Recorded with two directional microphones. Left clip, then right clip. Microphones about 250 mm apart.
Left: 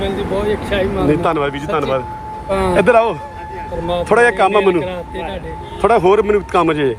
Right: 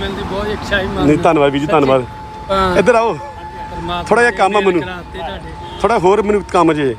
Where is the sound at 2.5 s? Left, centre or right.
Centre.